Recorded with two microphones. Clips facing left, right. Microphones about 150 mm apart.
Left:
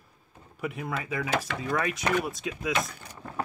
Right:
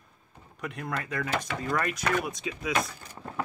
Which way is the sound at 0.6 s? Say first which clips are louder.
Left 2 dB; 5° left (ahead or behind).